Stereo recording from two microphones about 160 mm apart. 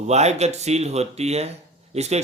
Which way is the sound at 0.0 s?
45° right (ahead or behind).